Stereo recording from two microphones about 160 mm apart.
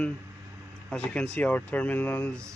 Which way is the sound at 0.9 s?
5° left (ahead or behind).